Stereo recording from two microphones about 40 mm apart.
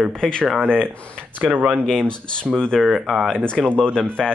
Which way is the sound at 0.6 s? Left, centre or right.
Left.